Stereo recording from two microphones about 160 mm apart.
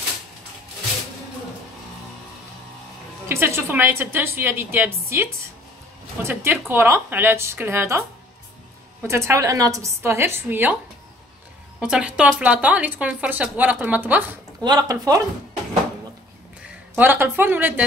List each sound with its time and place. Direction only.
3.3 s speech: 15° right (ahead or behind)
9.0 s speech: 15° right (ahead or behind)
11.8 s speech: 5° right (ahead or behind)
14.6 s speech: 25° right (ahead or behind)
16.9 s speech: 10° right (ahead or behind)